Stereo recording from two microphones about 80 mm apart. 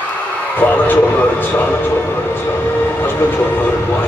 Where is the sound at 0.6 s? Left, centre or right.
Left.